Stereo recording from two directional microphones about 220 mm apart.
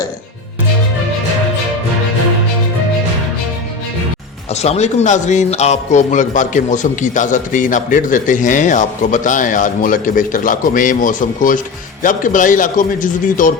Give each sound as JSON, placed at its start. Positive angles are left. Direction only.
{"t": 4.5, "sound": "speech", "side_deg": 30}